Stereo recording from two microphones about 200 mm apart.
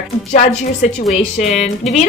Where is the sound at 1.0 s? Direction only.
Centre (ahead or behind).